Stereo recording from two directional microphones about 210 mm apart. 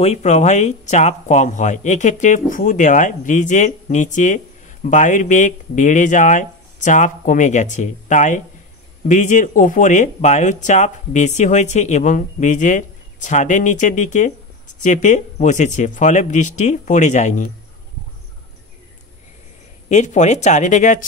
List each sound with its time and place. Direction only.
0.0 s speech: 30° left (ahead or behind)
19.9 s speech: 35° left (ahead or behind)